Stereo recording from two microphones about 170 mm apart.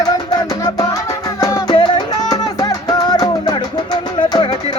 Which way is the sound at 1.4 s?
25° left (ahead or behind).